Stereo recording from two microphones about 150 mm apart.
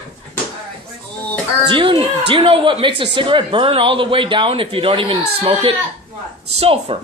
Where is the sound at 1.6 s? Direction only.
35° right (ahead or behind).